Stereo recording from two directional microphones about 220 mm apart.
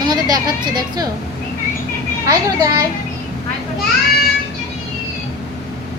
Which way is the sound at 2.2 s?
15° right (ahead or behind).